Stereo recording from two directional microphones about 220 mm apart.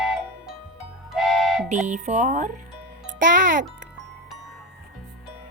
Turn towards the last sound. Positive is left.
turn(degrees=-35)  # may be behind; listen again after turning